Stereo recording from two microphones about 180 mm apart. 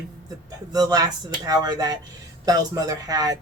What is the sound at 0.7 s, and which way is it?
Speech, 20° right (ahead or behind).